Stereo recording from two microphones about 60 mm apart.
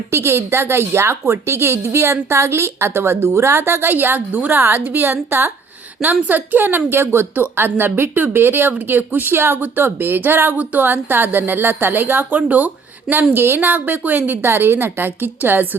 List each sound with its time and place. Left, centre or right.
0.1 s a woman's voice: right
13.3 s speech: right
13.7 s speech: right